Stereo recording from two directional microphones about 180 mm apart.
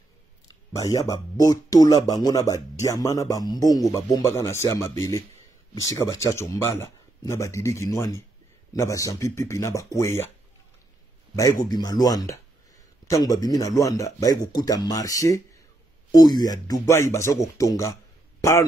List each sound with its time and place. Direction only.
0.7 s speech: 20° left (ahead or behind)
11.6 s speech: 20° left (ahead or behind)